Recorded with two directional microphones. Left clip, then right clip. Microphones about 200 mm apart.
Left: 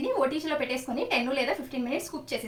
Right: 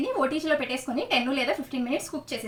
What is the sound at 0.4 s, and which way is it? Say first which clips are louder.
Speech: right 3 dB; 15° left (ahead or behind).